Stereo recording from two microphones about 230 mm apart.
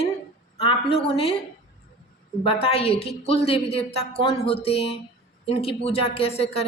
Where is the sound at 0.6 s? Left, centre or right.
Left.